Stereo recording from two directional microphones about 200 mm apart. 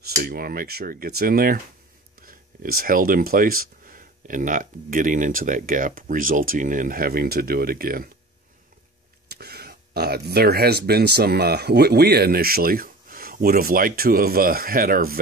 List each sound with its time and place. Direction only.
0.2 s speech: 45° right (ahead or behind)
2.1 s a sound: 45° right (ahead or behind)
2.8 s speech: 45° right (ahead or behind)
9.3 s speech: 50° right (ahead or behind)